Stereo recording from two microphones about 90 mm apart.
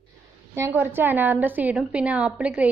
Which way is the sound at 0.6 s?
25° right (ahead or behind).